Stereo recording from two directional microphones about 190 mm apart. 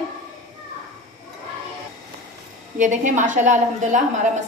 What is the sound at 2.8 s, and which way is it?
A woman's voice, 40° right (ahead or behind).